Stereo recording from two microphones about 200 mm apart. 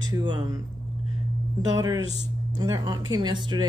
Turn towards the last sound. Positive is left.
turn(degrees=-20)  # may be behind; listen again after turning